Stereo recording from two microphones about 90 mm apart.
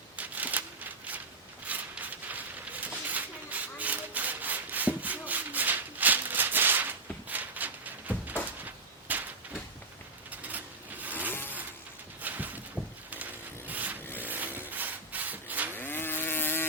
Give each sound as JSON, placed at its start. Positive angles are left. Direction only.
{"t": 0.2, "sound": "a sound", "side_deg": -15}
{"t": 10.4, "sound": "a sound", "side_deg": -20}
{"t": 13.1, "sound": "vehicle", "side_deg": -20}
{"t": 14.3, "sound": "wood", "side_deg": -20}
{"t": 14.7, "sound": "rub", "side_deg": -20}
{"t": 15.7, "sound": "vehicle", "side_deg": 25}